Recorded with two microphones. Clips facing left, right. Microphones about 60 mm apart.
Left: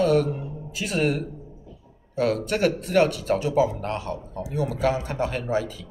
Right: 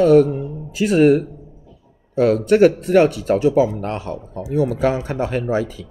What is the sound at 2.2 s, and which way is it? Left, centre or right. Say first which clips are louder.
Speech: right 9 dB; right.